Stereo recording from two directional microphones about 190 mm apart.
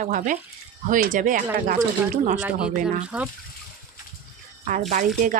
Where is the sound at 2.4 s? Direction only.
5° right (ahead or behind).